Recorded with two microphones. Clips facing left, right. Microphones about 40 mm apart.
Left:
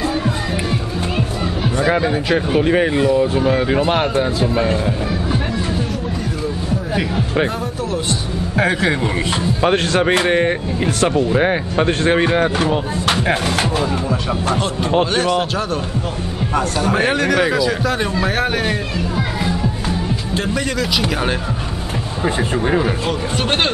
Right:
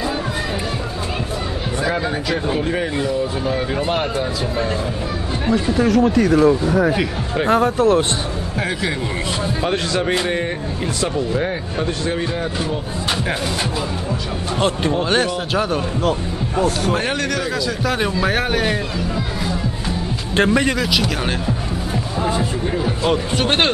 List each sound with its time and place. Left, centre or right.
1.9 s speech: left
5.8 s speech: right
7.4 s speech: right
8.5 s speech: left
11.3 s speech: left
16.8 s speech: centre
17.8 s speech: centre
20.4 s speech: right
22.4 s speech: left